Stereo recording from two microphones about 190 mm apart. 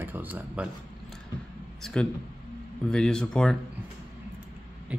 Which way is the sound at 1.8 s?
5° left (ahead or behind).